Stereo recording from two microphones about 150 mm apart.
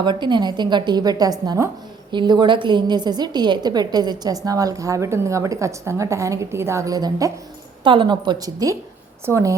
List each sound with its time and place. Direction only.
0.0 s a woman's voice: 30° right (ahead or behind)